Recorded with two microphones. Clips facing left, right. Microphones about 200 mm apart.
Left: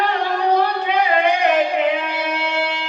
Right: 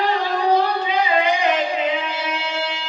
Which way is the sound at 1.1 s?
65° left (ahead or behind).